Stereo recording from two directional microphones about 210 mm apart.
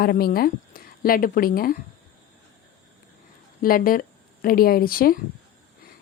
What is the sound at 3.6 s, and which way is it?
Speech, 40° left (ahead or behind).